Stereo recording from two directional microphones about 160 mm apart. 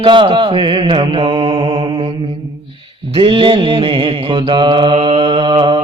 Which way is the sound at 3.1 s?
35° right (ahead or behind).